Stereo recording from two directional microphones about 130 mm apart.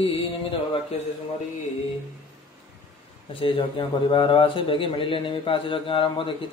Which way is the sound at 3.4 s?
40° left (ahead or behind).